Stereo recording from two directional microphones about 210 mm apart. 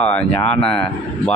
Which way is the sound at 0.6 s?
25° left (ahead or behind).